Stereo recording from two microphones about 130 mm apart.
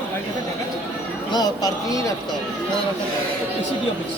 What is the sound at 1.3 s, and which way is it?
Speech, 30° left (ahead or behind).